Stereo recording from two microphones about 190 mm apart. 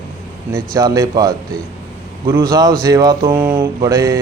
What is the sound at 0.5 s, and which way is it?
Speech, 20° right (ahead or behind).